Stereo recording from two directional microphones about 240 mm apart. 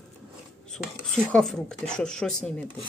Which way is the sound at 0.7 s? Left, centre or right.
Centre.